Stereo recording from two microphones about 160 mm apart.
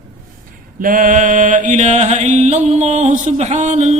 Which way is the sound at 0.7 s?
60° right (ahead or behind).